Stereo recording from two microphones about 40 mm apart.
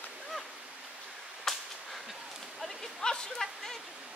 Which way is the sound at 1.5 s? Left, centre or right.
Centre.